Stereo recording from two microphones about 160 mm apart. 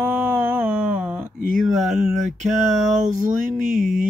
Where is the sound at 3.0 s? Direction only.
50° right (ahead or behind).